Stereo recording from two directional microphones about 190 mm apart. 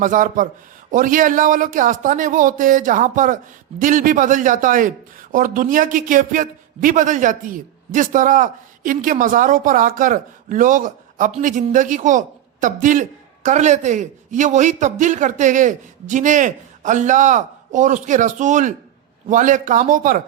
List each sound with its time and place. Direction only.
0.0 s speech: 45° right (ahead or behind)